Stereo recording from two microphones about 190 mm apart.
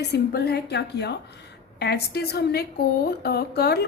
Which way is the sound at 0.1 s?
60° left (ahead or behind).